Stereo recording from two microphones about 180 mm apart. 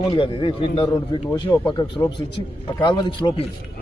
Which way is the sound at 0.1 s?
25° left (ahead or behind).